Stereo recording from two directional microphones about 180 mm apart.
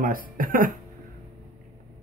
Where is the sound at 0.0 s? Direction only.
50° right (ahead or behind).